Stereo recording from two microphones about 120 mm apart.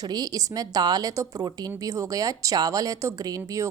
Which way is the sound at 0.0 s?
35° right (ahead or behind).